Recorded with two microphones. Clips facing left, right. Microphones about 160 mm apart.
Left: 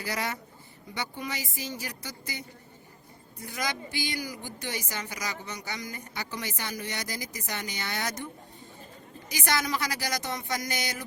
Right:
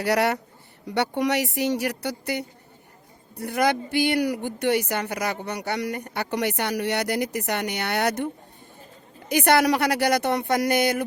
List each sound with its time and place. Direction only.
0.0 s a woman's voice: 70° right (ahead or behind)
9.3 s a woman's voice: 60° right (ahead or behind)